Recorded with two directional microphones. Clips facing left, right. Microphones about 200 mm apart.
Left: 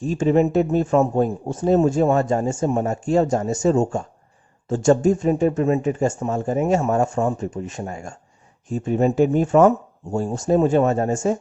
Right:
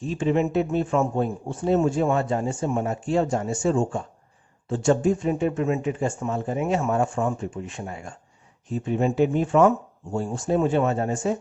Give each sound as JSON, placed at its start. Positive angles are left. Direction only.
{"t": 0.0, "sound": "speech", "side_deg": 45}